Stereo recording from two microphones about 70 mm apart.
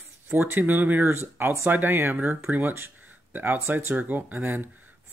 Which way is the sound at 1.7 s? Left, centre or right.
Right.